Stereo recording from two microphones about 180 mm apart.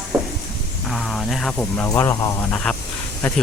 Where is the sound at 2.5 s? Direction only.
5° left (ahead or behind).